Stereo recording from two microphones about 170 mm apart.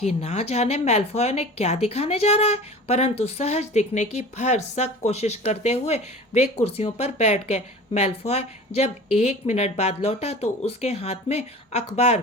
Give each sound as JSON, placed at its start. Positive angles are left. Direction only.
{"t": 0.0, "sound": "a woman's voice", "side_deg": 40}